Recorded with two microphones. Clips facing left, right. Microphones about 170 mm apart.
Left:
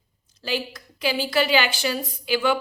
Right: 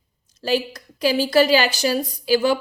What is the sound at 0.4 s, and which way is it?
A woman's voice, 40° right (ahead or behind).